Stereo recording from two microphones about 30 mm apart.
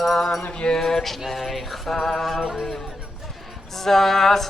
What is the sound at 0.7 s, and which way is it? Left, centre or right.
Music, centre.